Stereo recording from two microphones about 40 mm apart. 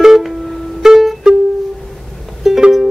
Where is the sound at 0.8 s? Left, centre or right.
Centre.